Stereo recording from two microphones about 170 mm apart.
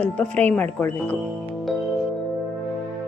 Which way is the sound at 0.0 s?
10° left (ahead or behind).